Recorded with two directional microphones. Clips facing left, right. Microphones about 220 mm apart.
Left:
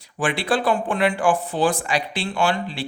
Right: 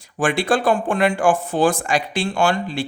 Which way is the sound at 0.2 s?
45° right (ahead or behind).